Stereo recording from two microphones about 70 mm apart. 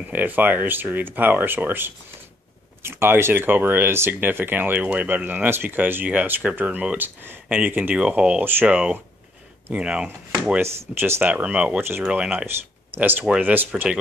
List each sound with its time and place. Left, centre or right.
0.1 s speech: right
10.6 s speech: right
11.3 s speech: centre
12.4 s speech: right